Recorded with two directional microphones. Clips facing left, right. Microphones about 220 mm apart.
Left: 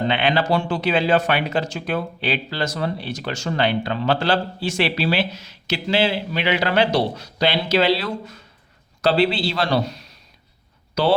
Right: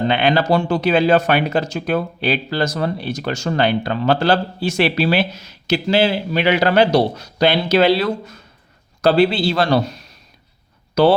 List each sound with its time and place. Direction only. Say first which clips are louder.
0.1 s a man's voice: right 4 dB; 45° right (ahead or behind)